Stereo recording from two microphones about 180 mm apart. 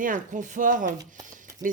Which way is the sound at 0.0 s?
45° right (ahead or behind).